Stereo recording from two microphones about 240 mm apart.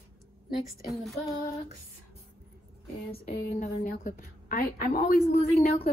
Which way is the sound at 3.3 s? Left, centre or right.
Left.